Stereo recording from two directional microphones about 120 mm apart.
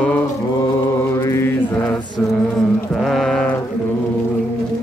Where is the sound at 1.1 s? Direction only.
25° left (ahead or behind).